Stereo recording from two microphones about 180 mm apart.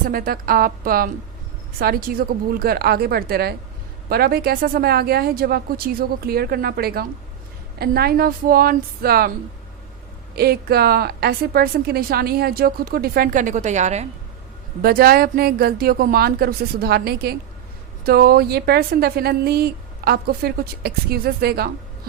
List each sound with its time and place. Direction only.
0.0 s a woman's voice: 50° right (ahead or behind)
10.3 s a woman's voice: 60° right (ahead or behind); by 14.1 s 40° right (ahead or behind)
14.8 s a woman's voice: 55° right (ahead or behind)